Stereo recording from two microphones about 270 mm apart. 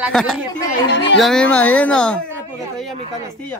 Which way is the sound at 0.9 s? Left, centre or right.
Left.